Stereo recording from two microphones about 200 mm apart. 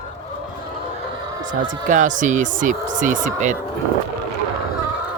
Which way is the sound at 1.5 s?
40° right (ahead or behind).